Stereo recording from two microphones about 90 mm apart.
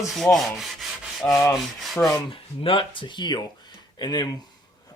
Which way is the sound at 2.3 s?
80° left.